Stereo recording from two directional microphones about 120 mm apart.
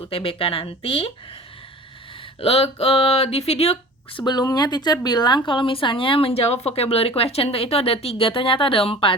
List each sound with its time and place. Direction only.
0.0 s a woman's voice: 50° left (ahead or behind)
2.4 s speech: 55° left (ahead or behind)
4.2 s a woman's voice: 35° left (ahead or behind)